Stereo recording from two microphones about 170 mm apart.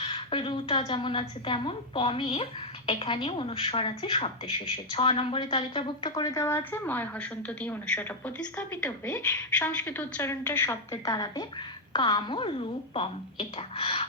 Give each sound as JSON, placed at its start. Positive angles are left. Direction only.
{"t": 0.0, "sound": "a woman's voice", "side_deg": 30}
{"t": 13.6, "sound": "speech", "side_deg": 35}